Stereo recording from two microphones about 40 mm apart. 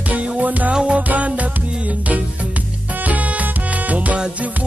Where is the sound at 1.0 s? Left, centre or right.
Right.